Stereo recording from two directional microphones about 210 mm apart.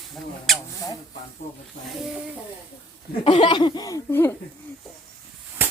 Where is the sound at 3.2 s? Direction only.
25° left (ahead or behind).